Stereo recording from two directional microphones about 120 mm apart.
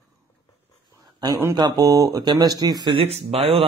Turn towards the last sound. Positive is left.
turn(degrees=-55)  # may be behind; listen again after turning